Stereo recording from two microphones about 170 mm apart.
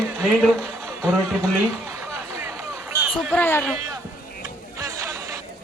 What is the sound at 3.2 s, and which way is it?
Speech, 5° left (ahead or behind).